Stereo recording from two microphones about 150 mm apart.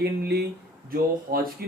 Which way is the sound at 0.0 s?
90° right.